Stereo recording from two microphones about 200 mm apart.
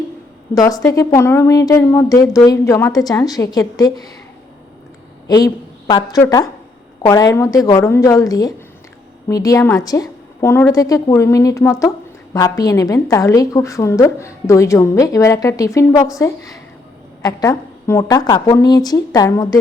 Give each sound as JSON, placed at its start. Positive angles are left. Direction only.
{"t": 0.5, "sound": "a woman's voice", "side_deg": 15}
{"t": 5.9, "sound": "a woman's voice", "side_deg": 20}